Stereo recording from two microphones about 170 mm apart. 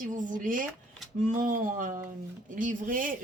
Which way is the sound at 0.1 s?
50° right (ahead or behind).